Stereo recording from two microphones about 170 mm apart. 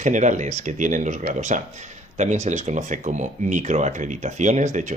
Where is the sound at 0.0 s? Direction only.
45° right (ahead or behind).